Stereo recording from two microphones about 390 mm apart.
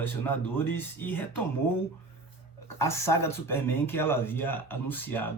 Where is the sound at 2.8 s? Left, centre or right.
Centre.